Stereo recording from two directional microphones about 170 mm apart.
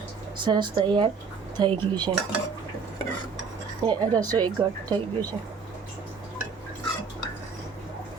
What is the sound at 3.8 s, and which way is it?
Speech, 25° right (ahead or behind).